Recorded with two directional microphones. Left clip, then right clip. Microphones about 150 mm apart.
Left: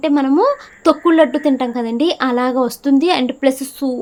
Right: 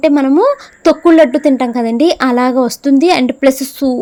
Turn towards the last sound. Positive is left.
turn(degrees=-35)  # may be behind; listen again after turning